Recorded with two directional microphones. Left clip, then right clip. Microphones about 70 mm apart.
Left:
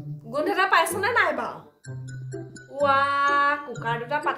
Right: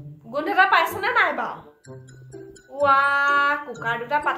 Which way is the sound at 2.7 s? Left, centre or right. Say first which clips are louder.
Right 3 dB; left.